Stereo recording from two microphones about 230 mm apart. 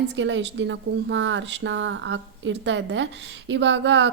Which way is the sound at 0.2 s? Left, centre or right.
Right.